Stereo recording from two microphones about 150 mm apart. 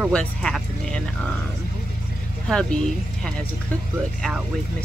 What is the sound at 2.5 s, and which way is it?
Speech, 5° left (ahead or behind).